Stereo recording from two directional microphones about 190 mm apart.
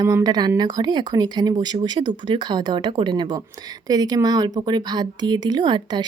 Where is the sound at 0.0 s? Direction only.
20° right (ahead or behind).